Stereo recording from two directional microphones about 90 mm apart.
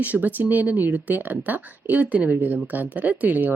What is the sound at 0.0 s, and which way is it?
Speech, 20° right (ahead or behind).